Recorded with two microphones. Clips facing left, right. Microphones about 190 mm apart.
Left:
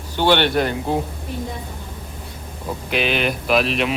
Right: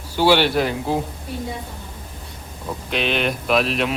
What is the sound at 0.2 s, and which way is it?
Speech, 5° right (ahead or behind).